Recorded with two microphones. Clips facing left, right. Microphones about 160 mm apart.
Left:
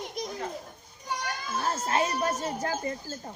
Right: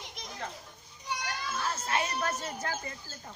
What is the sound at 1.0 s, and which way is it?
Children playing, 45° left (ahead or behind).